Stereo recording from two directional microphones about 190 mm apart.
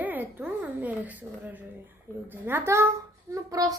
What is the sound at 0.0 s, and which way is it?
A woman's voice, 10° right (ahead or behind).